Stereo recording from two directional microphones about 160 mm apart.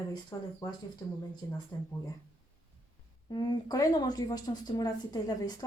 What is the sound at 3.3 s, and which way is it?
A woman's voice, 25° left (ahead or behind).